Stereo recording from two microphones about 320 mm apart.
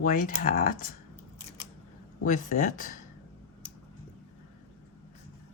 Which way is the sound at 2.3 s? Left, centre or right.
Left.